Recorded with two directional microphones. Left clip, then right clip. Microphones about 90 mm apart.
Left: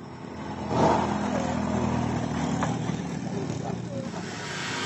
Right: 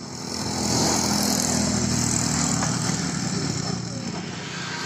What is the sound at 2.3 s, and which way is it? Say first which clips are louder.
Vehicle: right 4 dB; 30° left (ahead or behind).